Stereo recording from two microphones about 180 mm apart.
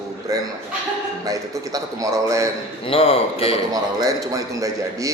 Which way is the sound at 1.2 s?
20° right (ahead or behind).